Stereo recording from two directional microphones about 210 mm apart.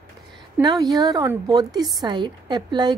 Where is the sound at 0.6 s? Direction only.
20° right (ahead or behind).